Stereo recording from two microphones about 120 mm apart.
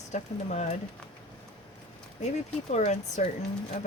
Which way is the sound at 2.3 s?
75° left (ahead or behind).